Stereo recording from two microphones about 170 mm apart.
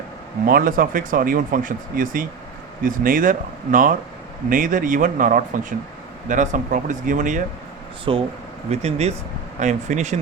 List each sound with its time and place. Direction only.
0.4 s speech: 55° right (ahead or behind)
8.1 s speech: 30° right (ahead or behind)